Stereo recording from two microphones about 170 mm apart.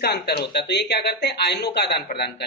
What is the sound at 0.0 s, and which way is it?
Speech, 70° left (ahead or behind).